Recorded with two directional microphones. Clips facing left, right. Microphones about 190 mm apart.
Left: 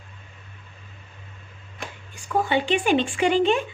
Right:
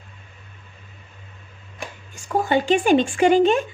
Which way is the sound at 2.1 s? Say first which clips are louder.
Right 2 dB; 45° right (ahead or behind).